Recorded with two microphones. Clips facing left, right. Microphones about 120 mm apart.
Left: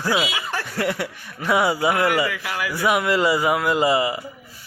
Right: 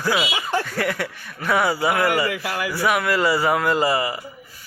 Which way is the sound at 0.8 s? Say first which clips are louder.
Even; 20° left (ahead or behind).